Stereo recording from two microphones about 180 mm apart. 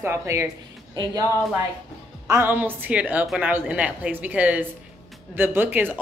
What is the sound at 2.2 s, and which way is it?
A woman's voice, 15° right (ahead or behind).